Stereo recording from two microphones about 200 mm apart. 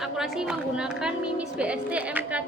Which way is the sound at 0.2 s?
5° right (ahead or behind).